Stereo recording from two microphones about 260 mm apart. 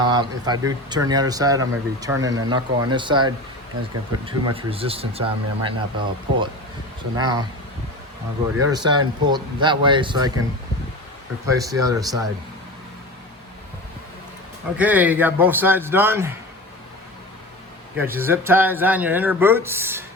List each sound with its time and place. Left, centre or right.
0.0 s speech: centre
8.7 s speech: centre
11.4 s speech: centre
14.8 s speech: centre
17.9 s speech: centre